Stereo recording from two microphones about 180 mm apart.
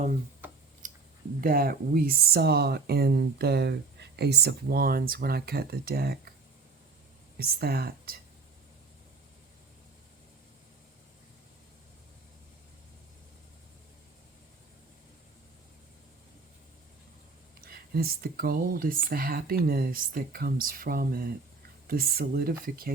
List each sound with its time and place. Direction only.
0.4 s tick: 10° right (ahead or behind)
0.8 s a sound: 45° right (ahead or behind)
1.4 s speech: 50° right (ahead or behind)
7.3 s speech: 60° right (ahead or behind)
17.7 s speech: 55° right (ahead or behind)